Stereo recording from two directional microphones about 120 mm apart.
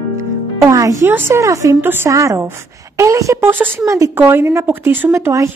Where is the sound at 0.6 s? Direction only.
25° right (ahead or behind).